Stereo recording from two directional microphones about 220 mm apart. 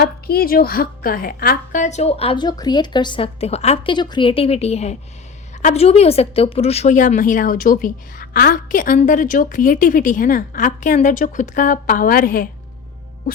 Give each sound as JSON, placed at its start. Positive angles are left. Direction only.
{"t": 0.0, "sound": "a woman's voice", "side_deg": 45}